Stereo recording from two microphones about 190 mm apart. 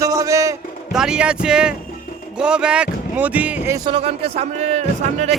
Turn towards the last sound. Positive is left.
turn(degrees=-35)  # may be behind; listen again after turning